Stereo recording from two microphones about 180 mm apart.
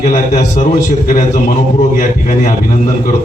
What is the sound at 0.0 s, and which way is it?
A man's voice, 40° left (ahead or behind).